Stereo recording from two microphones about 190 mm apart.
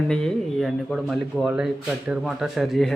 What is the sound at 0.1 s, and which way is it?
Speech, 5° left (ahead or behind).